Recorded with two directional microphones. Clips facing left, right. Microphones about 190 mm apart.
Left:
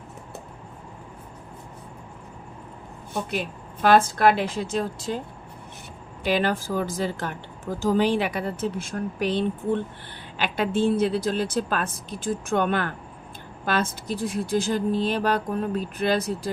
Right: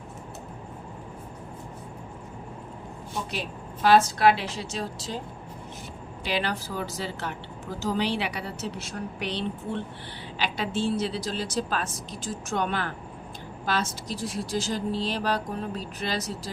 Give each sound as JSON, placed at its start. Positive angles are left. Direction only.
{"t": 3.8, "sound": "speech", "side_deg": 50}
{"t": 6.2, "sound": "speech", "side_deg": 50}